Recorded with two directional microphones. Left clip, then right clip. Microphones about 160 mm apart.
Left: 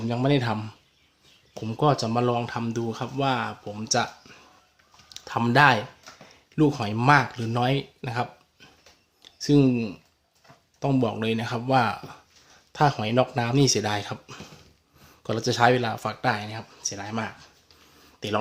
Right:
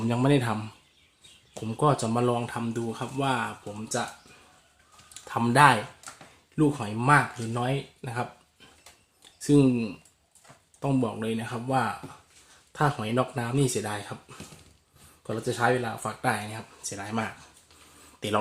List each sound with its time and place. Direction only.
0.0 s speech: 5° right (ahead or behind)
5.2 s speech: 10° left (ahead or behind)
16.2 s speech: 5° left (ahead or behind)